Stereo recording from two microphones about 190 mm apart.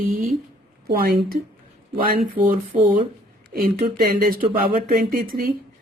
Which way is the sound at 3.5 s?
50° right (ahead or behind).